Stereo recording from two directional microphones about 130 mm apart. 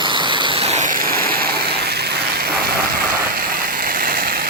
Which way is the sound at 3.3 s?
90° right.